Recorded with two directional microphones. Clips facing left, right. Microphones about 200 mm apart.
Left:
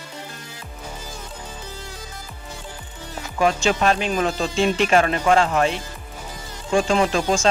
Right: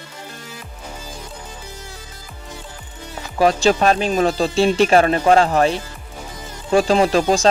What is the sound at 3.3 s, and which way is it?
Speech, 35° right (ahead or behind).